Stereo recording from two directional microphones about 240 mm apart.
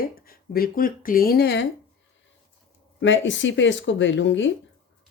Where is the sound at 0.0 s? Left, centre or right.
Left.